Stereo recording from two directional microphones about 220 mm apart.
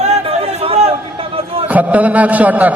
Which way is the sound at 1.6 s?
5° right (ahead or behind).